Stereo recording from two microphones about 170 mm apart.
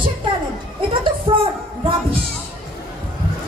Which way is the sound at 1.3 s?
35° right (ahead or behind).